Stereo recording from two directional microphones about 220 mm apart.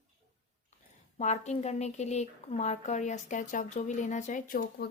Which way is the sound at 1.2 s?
30° left (ahead or behind).